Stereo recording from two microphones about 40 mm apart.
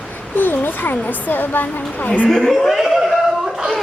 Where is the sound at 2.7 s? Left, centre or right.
Centre.